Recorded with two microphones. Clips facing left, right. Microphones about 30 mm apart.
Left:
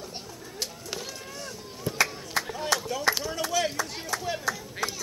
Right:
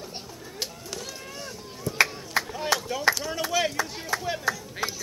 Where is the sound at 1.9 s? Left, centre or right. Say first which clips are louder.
Right 4 dB; left.